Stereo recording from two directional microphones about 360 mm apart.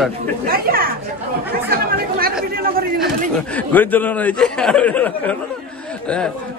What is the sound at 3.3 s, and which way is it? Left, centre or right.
Speech, centre.